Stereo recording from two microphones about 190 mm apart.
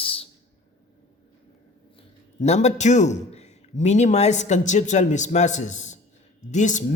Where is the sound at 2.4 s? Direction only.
35° left (ahead or behind).